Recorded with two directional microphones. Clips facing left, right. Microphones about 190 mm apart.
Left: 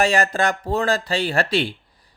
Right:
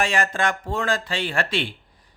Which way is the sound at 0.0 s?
35° left (ahead or behind).